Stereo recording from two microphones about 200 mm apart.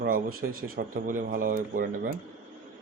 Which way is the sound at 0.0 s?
45° right (ahead or behind).